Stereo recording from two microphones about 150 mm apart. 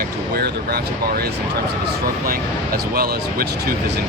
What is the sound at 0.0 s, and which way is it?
Speech, 90° right.